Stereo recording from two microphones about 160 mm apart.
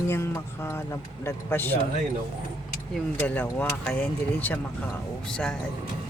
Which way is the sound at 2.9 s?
5° left (ahead or behind).